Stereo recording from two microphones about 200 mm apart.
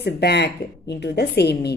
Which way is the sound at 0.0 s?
55° left (ahead or behind).